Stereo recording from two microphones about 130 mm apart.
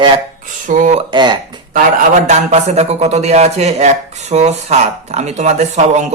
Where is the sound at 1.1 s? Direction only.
35° right (ahead or behind).